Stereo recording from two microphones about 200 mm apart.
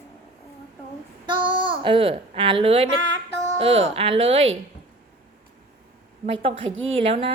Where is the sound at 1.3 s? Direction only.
25° right (ahead or behind).